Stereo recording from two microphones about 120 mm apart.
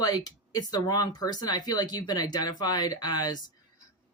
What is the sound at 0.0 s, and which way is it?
Speech, 30° left (ahead or behind).